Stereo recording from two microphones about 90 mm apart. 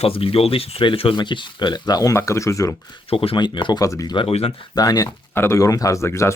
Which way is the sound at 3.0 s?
90° left.